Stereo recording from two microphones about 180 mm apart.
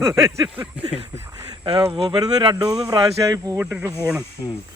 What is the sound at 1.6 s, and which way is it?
Speech, 25° right (ahead or behind).